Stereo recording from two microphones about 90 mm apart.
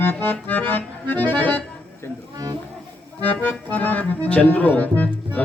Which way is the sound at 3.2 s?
20° left (ahead or behind).